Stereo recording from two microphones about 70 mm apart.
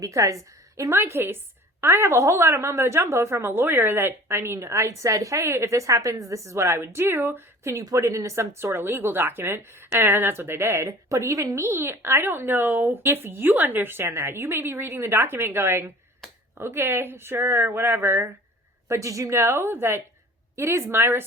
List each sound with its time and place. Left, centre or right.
0.0 s a woman's voice: right
0.9 s a woman's voice: right
10.8 s speech: right
11.6 s a woman's voice: right
18.9 s a woman's voice: right